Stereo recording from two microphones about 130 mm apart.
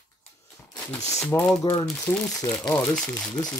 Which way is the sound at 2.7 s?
15° left (ahead or behind).